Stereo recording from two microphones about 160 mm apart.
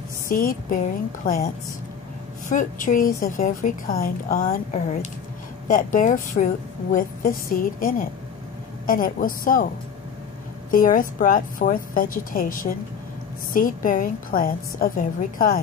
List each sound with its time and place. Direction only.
0.3 s a woman's voice: 60° left (ahead or behind)
2.5 s a woman's voice: 55° left (ahead or behind)
10.7 s a woman's voice: 60° left (ahead or behind)